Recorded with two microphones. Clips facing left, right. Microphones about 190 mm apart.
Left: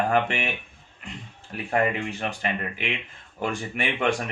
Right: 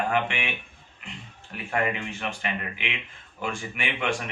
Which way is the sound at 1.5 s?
35° left (ahead or behind).